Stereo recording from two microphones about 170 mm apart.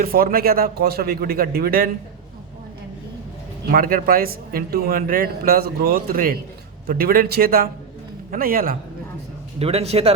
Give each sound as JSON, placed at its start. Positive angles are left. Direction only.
{"t": 0.0, "sound": "a man's voice", "side_deg": -60}
{"t": 3.7, "sound": "a man's voice", "side_deg": -55}
{"t": 9.6, "sound": "a man's voice", "side_deg": -35}